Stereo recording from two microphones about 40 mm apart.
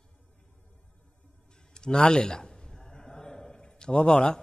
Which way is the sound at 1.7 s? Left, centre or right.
Centre.